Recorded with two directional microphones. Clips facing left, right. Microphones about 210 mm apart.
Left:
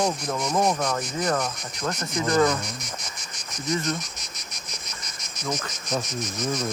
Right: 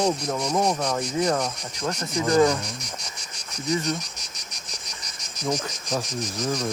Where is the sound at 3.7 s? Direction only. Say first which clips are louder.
Right 1 dB; 10° right (ahead or behind).